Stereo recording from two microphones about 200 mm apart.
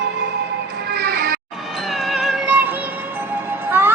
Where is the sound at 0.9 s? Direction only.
55° right (ahead or behind).